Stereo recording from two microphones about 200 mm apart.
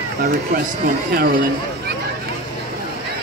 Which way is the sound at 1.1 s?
50° right (ahead or behind).